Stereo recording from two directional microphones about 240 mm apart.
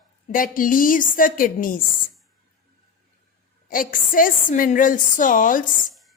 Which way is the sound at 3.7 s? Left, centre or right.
Left.